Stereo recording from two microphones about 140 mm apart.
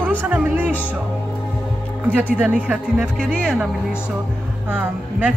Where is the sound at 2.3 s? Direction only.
10° right (ahead or behind).